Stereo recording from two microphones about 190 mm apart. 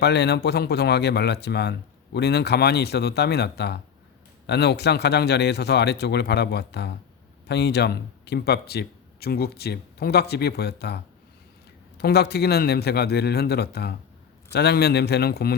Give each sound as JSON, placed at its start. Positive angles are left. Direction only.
{"t": 0.0, "sound": "speech", "side_deg": 60}